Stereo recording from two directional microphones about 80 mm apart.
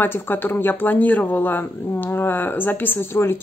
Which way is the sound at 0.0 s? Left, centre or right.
Left.